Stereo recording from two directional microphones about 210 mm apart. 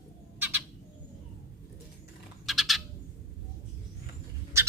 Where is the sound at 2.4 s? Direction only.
Centre (ahead or behind).